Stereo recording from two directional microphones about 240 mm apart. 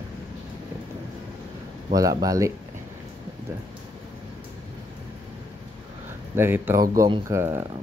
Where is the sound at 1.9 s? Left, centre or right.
Centre.